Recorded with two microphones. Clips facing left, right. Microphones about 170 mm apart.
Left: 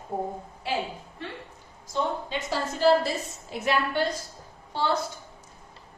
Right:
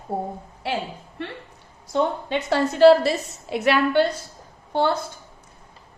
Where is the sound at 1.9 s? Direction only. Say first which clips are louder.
Right 6 dB; 65° right (ahead or behind).